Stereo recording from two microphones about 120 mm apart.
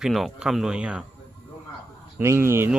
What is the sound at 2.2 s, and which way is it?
Speech, 20° right (ahead or behind).